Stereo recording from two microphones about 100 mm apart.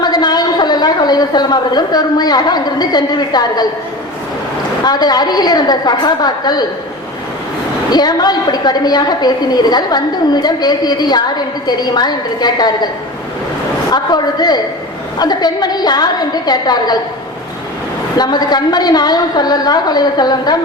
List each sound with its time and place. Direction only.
0.0 s a woman's voice: 45° left (ahead or behind)
4.9 s a woman's voice: 45° left (ahead or behind)
7.9 s a woman's voice: 40° left (ahead or behind)
13.9 s a woman's voice: 45° left (ahead or behind)
18.2 s a woman's voice: 45° left (ahead or behind)